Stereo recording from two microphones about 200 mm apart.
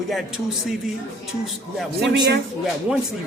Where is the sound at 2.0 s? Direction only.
55° right (ahead or behind).